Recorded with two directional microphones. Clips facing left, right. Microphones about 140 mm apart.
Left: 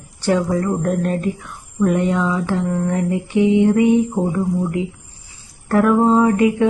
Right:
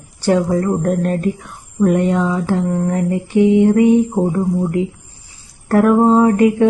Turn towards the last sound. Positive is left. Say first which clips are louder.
# right 3 dB
turn(degrees=-40)  # may be behind; listen again after turning